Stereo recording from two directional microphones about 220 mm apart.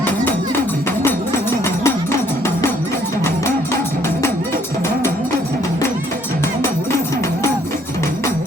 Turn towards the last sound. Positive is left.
turn(degrees=15)  # may be behind; listen again after turning